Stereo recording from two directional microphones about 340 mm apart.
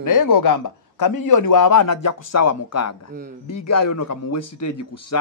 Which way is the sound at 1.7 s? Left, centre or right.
Left.